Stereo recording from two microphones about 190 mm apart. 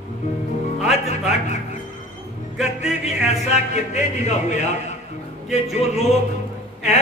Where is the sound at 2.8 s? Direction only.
35° left (ahead or behind).